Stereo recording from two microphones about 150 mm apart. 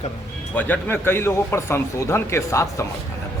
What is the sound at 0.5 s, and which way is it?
A man's voice, 10° left (ahead or behind).